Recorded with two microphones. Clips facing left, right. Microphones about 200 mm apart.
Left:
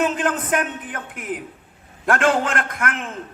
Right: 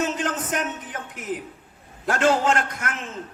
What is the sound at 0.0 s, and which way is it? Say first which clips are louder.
A man's voice: left 4 dB; 55° left (ahead or behind).